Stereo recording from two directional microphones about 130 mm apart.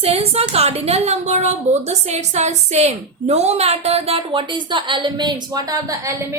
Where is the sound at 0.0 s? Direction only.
50° right (ahead or behind).